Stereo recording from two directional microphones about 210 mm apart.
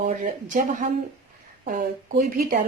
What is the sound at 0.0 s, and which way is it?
A woman's voice, 40° right (ahead or behind).